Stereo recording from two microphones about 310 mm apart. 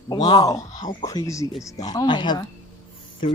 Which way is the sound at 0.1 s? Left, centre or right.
Centre.